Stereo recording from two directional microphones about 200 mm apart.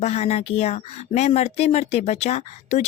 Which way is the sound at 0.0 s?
30° left (ahead or behind).